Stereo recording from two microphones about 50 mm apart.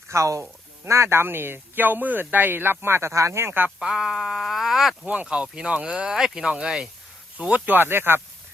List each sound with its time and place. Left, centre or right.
0.1 s speech: right
0.9 s speech: right
3.4 s speech: right
3.8 s speech: centre
5.0 s speech: right
7.3 s speech: right